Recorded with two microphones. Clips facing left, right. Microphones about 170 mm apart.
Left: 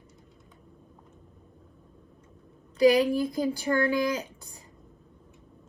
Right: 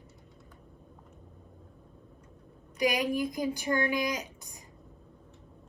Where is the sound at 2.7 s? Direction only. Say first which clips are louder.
Left 8 dB; 15° right (ahead or behind).